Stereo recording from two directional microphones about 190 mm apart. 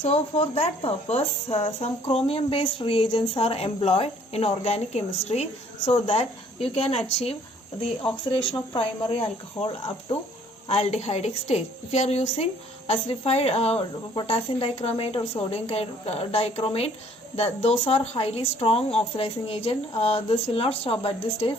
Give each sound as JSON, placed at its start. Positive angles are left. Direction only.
{"t": 0.0, "sound": "speech", "side_deg": 30}
{"t": 8.7, "sound": "speech", "side_deg": 30}